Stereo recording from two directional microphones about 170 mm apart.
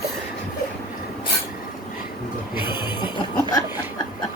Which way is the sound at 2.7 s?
25° left (ahead or behind).